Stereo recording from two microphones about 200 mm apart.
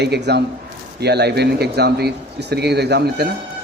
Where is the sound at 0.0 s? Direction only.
55° right (ahead or behind).